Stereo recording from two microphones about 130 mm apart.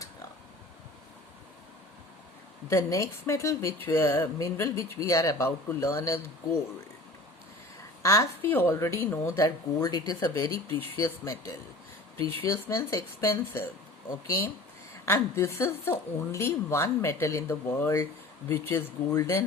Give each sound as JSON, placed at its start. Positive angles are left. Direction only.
{"t": 2.6, "sound": "a woman's voice", "side_deg": 25}
{"t": 8.0, "sound": "a woman's voice", "side_deg": 25}
{"t": 9.4, "sound": "a woman's voice", "side_deg": 30}